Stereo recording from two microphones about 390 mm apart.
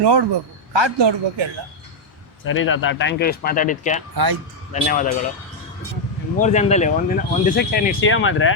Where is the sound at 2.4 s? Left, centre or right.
Left.